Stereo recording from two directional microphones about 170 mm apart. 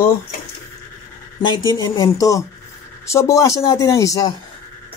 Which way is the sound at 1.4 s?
25° left (ahead or behind).